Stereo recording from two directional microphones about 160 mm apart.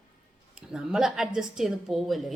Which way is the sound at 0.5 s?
5° right (ahead or behind).